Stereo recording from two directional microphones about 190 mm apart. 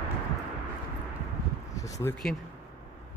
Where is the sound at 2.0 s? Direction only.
20° left (ahead or behind).